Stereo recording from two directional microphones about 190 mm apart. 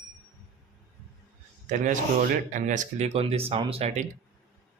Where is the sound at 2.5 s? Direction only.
40° right (ahead or behind).